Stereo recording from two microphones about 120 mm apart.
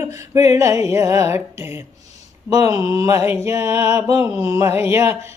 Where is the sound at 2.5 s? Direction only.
30° right (ahead or behind).